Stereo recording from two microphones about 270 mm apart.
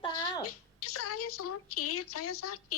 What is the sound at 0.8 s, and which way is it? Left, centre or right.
A woman's voice, left.